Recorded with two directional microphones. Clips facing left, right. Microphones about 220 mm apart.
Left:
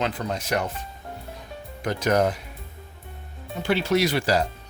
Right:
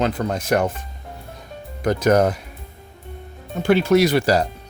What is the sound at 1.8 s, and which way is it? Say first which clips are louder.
Speech: right 5 dB; 45° right (ahead or behind).